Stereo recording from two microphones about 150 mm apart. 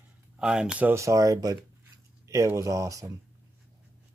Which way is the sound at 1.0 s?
20° right (ahead or behind).